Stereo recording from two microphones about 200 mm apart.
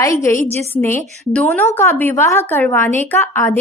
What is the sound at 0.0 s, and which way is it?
A woman's voice, 15° left (ahead or behind).